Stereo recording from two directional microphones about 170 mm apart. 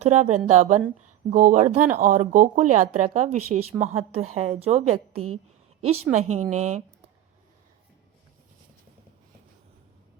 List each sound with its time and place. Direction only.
0.0 s speech: 45° right (ahead or behind)